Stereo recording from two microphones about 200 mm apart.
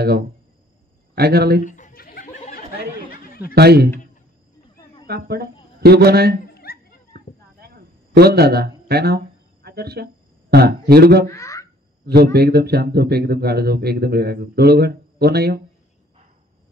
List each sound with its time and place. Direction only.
1.1 s speech: 50° right (ahead or behind)
1.7 s a sound: 40° left (ahead or behind)
3.5 s speech: 55° right (ahead or behind)
5.0 s speech: 50° right (ahead or behind)
6.4 s a sound: 50° left (ahead or behind)
7.1 s a sound: 50° right (ahead or behind)
10.5 s speech: 50° right (ahead or behind)
11.3 s boing: 15° left (ahead or behind)
12.1 s speech: 50° right (ahead or behind)